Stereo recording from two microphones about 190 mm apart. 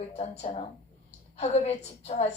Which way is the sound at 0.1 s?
35° left (ahead or behind).